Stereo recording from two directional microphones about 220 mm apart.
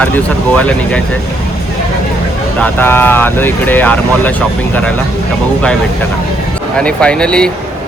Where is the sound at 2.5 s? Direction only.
10° left (ahead or behind).